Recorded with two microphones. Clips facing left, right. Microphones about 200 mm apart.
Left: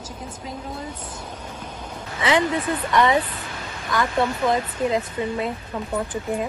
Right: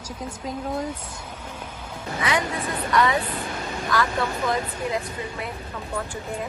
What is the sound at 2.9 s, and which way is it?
Speech, 25° left (ahead or behind).